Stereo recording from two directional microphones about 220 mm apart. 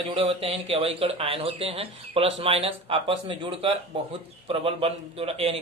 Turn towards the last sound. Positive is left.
turn(degrees=-25)  # may be behind; listen again after turning